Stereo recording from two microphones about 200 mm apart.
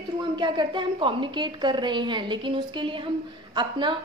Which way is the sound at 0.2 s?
25° right (ahead or behind).